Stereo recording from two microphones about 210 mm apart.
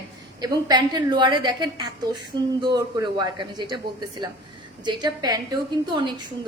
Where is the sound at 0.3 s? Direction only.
20° right (ahead or behind).